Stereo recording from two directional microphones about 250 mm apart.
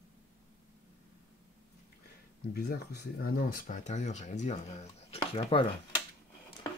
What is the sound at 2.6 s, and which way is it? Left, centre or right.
Speech, left.